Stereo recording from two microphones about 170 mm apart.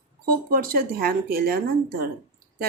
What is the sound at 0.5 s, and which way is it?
A woman's voice, 60° right (ahead or behind).